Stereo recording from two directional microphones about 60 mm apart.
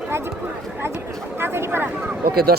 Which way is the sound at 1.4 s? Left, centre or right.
Right.